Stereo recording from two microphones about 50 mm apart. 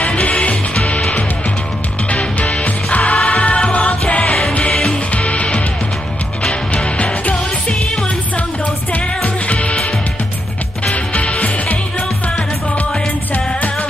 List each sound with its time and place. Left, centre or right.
0.0 s music: left
2.0 s music: left
6.7 s music: left
8.9 s music: left
10.9 s music: left